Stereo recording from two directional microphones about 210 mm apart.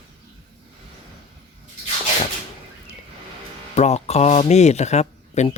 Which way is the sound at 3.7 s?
30° left (ahead or behind).